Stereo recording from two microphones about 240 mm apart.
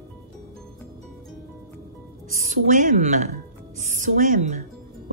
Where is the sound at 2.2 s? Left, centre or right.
Right.